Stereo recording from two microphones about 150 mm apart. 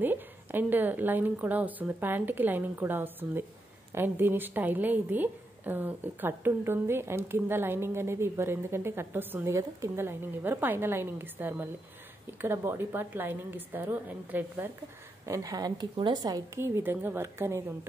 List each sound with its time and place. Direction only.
0.0 s a woman's voice: 15° right (ahead or behind)